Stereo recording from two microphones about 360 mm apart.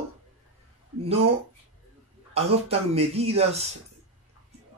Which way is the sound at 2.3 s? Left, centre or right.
Centre.